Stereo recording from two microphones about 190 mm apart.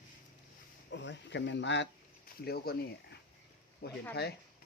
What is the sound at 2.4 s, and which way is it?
Speech, 55° left (ahead or behind).